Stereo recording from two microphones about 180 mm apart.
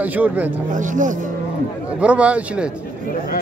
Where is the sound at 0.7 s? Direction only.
45° right (ahead or behind).